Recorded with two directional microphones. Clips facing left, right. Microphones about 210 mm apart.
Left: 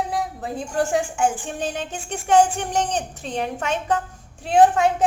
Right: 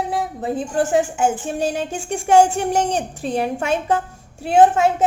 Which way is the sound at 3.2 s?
10° right (ahead or behind).